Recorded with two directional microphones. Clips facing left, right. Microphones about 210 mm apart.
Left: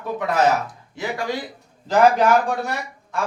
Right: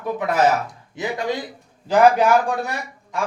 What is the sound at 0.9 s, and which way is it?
A man's voice, 20° right (ahead or behind).